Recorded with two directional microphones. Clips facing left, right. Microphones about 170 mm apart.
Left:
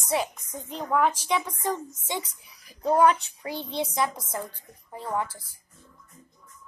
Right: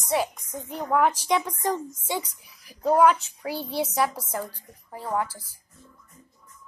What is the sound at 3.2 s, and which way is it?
A child's voice, 10° right (ahead or behind).